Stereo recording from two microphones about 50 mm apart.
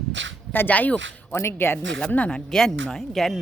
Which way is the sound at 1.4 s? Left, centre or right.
Left.